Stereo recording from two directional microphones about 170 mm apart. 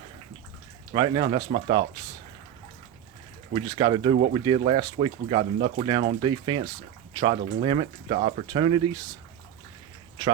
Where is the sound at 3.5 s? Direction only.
25° right (ahead or behind).